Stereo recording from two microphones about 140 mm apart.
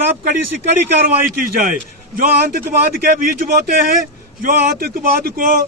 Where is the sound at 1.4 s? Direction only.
80° right.